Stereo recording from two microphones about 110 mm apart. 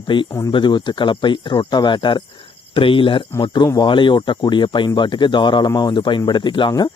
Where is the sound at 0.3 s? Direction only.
35° left (ahead or behind).